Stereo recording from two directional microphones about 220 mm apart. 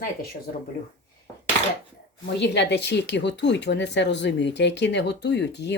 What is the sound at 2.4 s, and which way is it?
Speech, 50° left (ahead or behind).